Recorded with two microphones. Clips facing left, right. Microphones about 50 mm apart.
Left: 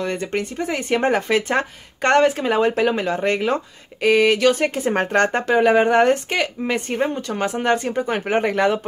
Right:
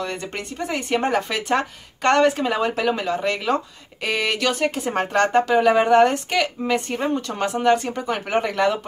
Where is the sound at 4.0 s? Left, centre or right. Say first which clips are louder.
Left 7 dB; centre.